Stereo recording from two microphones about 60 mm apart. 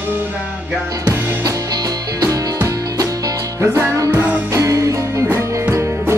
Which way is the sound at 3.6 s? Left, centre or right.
Right.